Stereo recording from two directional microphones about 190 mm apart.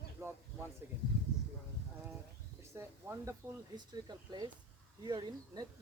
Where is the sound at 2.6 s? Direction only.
15° right (ahead or behind).